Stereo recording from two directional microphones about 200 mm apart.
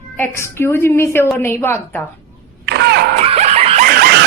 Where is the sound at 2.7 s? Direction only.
55° right (ahead or behind).